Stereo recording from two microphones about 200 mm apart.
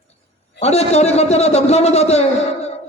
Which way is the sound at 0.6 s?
30° left (ahead or behind).